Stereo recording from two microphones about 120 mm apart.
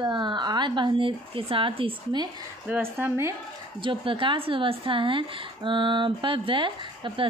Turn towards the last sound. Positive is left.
turn(degrees=-45)  # may be behind; listen again after turning